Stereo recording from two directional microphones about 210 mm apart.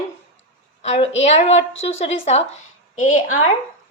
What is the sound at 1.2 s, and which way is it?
A woman's voice, 30° left (ahead or behind).